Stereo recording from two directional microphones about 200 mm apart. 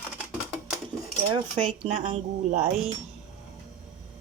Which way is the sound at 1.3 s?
30° right (ahead or behind).